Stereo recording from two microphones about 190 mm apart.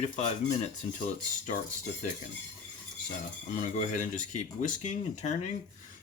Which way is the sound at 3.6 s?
40° left (ahead or behind).